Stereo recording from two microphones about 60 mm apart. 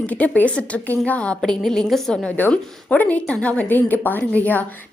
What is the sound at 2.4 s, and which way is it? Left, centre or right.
A woman's voice, left.